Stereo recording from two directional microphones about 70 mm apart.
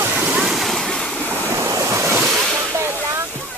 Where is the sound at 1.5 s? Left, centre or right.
Right.